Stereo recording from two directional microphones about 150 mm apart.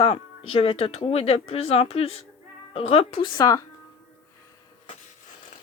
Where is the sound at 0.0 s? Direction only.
40° left (ahead or behind); by 3.6 s 25° left (ahead or behind).